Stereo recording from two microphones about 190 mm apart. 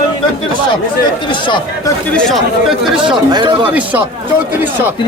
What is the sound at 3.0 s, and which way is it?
Speech, 25° right (ahead or behind).